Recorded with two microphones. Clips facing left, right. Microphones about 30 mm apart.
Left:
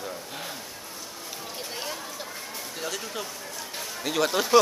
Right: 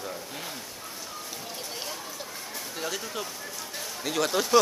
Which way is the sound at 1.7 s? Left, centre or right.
Centre.